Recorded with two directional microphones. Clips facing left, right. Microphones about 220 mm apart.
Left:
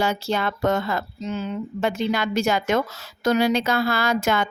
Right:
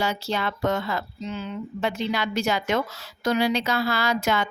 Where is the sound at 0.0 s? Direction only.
50° left (ahead or behind).